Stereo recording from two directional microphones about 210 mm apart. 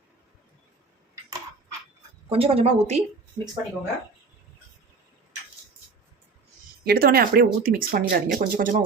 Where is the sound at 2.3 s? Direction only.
30° right (ahead or behind).